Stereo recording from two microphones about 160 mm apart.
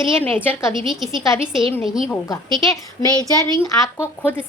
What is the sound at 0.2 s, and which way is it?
Speech, 10° left (ahead or behind).